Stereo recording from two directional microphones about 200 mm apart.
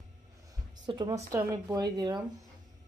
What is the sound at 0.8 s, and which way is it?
Speech, 20° right (ahead or behind).